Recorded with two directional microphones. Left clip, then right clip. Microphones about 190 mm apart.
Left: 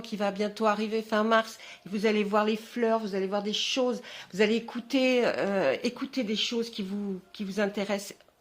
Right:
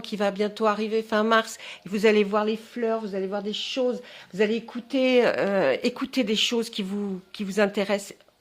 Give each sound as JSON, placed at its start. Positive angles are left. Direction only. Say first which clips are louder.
{"t": 0.1, "sound": "a woman's voice", "louder": "right 4 dB", "side_deg": -25}
{"t": 1.9, "sound": "speech", "louder": "right 7 dB", "side_deg": -35}
{"t": 2.3, "sound": "speech", "louder": "right 1 dB", "side_deg": -10}
{"t": 5.0, "sound": "a woman's voice", "louder": "right 6 dB", "side_deg": -25}
{"t": 6.0, "sound": "speech", "louder": "right 6 dB", "side_deg": -40}